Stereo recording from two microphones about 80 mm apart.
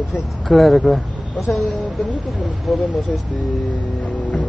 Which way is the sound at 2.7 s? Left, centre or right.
Centre.